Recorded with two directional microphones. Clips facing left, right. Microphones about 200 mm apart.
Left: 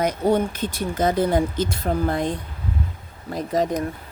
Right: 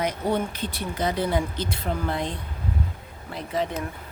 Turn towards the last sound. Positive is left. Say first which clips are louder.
# left 6 dB
turn(degrees=40)  # may be behind; listen again after turning